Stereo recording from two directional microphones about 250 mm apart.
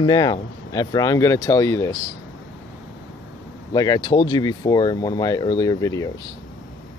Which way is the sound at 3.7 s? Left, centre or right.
Centre.